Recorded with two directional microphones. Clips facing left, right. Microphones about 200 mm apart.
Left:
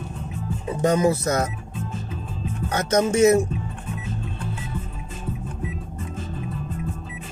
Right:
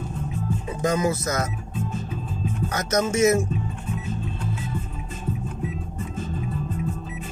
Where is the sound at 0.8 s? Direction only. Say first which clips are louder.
Left 4 dB; 30° left (ahead or behind).